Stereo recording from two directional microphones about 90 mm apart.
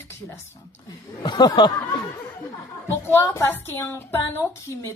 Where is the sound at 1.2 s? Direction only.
55° left (ahead or behind).